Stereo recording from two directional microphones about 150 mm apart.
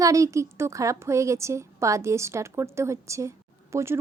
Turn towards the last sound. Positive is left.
turn(degrees=-20)  # may be behind; listen again after turning